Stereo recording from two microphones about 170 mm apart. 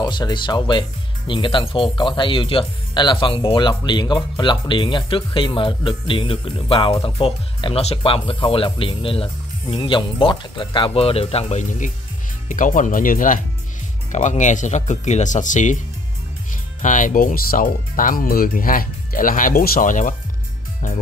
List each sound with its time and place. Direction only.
0.0 s speech: 25° left (ahead or behind); by 11.9 s 40° left (ahead or behind)
12.4 s speech: 50° left (ahead or behind)
16.8 s speech: 50° left (ahead or behind)